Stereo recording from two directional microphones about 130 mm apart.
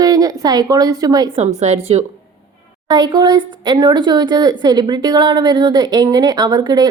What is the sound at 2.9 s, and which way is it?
A woman's voice, 35° right (ahead or behind).